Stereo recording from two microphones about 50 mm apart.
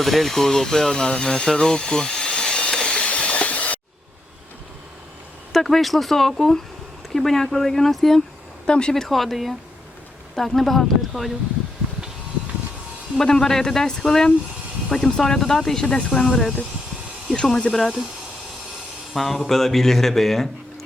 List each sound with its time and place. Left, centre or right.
0.0 s a sound: centre; by 3.8 s left
5.5 s speech: centre
8.6 s speech: centre
13.1 s speech: centre
17.3 s speech: left; by 18.0 s centre
19.1 s speech: centre